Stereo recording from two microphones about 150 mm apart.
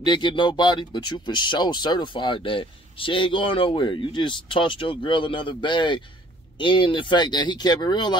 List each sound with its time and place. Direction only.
0.0 s speech: 30° left (ahead or behind)